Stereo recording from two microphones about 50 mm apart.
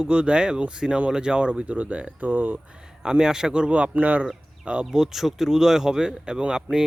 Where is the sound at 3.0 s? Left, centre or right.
Centre; by 4.2 s right.